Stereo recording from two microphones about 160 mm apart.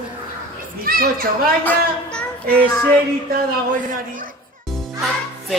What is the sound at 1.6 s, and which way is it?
Child singing, 10° left (ahead or behind).